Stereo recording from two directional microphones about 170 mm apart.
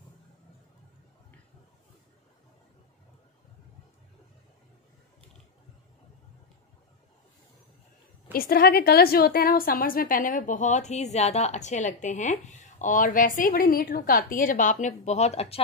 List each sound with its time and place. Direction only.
8.3 s a woman's voice: 60° left (ahead or behind); by 15.6 s 40° left (ahead or behind)